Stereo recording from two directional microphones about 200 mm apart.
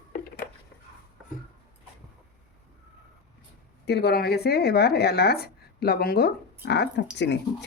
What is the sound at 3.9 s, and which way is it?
Speech, 55° left (ahead or behind).